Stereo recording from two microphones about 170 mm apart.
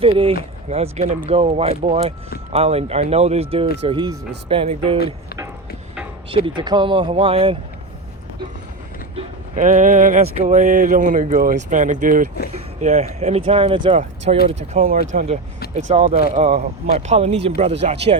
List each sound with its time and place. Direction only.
0.0 s speech: 35° right (ahead or behind)
6.3 s speech: 30° right (ahead or behind)
9.6 s speech: 45° right (ahead or behind)
12.5 s speech: 40° right (ahead or behind)
14.3 s speech: 45° right (ahead or behind)
14.7 s speech: 55° right (ahead or behind)
15.7 s speech: 40° right (ahead or behind)